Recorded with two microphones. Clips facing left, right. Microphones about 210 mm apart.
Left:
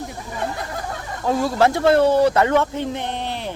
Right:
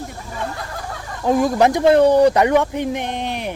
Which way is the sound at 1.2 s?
15° right (ahead or behind).